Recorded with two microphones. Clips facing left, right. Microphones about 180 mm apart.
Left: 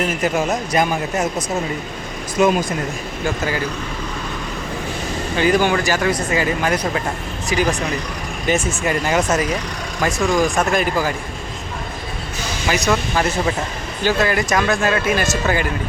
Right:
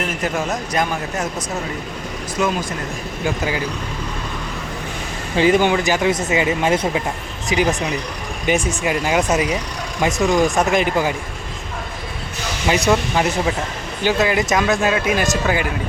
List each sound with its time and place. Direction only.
0.2 s a man's voice: 5° left (ahead or behind)
2.4 s a man's voice: 15° left (ahead or behind)
3.2 s speech: 10° right (ahead or behind)
5.4 s speech: 20° right (ahead or behind)
12.6 s speech: 25° right (ahead or behind)
12.9 s speech: 15° right (ahead or behind)